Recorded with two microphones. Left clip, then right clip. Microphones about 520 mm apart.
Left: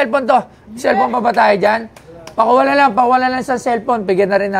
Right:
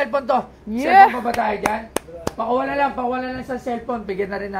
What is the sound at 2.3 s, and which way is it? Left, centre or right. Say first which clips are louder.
A woman's voice: left 10 dB; left.